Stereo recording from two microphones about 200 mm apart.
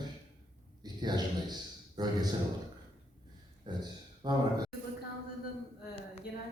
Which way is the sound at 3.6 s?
20° right (ahead or behind).